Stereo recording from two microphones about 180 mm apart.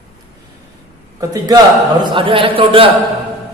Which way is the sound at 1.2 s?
20° right (ahead or behind).